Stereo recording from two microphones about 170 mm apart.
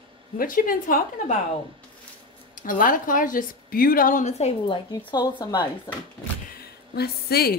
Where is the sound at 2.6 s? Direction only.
50° left (ahead or behind); by 5.6 s 25° left (ahead or behind).